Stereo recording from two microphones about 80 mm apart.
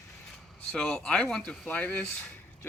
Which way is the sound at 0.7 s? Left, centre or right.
Centre.